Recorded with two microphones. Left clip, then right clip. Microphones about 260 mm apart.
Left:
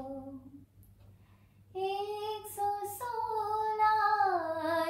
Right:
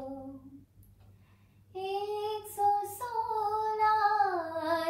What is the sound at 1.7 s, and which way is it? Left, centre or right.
Child singing, centre.